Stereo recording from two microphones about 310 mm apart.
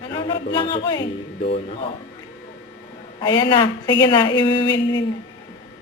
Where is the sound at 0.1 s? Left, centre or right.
Centre.